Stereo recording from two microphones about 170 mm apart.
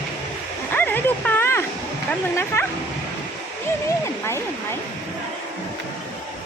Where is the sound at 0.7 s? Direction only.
10° left (ahead or behind).